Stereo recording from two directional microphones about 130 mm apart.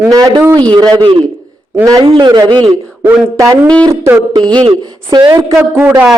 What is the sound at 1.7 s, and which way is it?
Speech, 25° right (ahead or behind).